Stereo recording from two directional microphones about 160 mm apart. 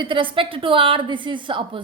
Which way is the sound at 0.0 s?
30° right (ahead or behind).